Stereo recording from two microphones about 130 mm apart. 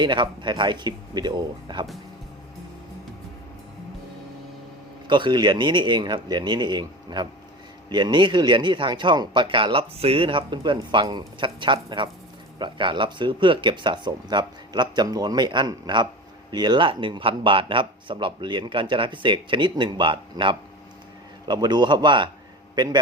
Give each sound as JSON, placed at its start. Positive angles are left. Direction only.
{"t": 0.0, "sound": "speech", "side_deg": -35}
{"t": 5.0, "sound": "a man's voice", "side_deg": -35}